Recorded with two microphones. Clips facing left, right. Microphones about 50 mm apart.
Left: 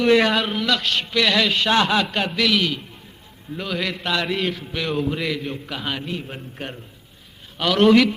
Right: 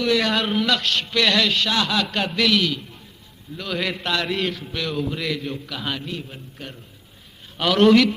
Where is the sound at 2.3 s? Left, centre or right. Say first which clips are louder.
Right 1 dB; centre.